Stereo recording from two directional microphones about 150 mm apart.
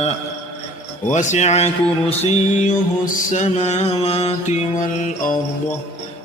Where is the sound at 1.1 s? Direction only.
55° left (ahead or behind).